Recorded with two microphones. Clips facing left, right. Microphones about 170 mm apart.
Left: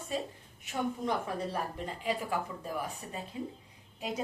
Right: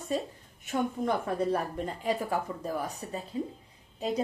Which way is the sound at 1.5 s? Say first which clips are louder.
Right 6 dB; 45° right (ahead or behind).